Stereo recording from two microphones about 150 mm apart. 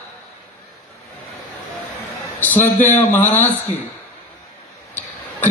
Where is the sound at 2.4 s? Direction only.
15° left (ahead or behind).